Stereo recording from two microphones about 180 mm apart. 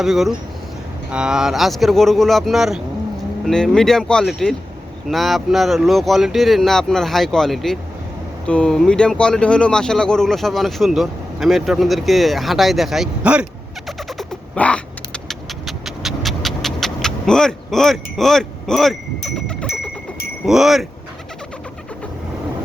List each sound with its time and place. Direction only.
0.0 s speech: centre (ahead or behind)